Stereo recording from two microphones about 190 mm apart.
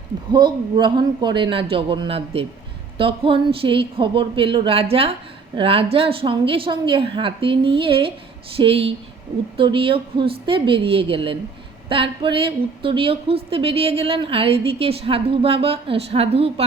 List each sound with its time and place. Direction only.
0.3 s a woman's voice: 25° right (ahead or behind)